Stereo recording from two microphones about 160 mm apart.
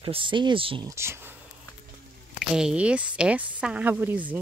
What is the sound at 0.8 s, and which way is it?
Speech, 15° right (ahead or behind).